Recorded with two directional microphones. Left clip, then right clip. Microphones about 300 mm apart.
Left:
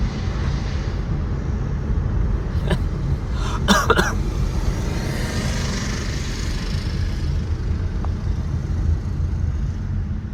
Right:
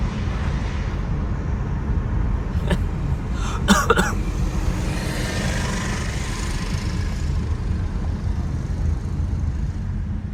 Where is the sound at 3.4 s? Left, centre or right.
Centre.